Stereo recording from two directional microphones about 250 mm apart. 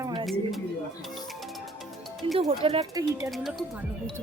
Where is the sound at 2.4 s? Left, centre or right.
Right.